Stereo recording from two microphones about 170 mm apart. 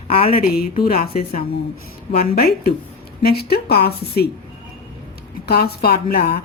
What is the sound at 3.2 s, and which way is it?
A woman's voice, 65° left (ahead or behind).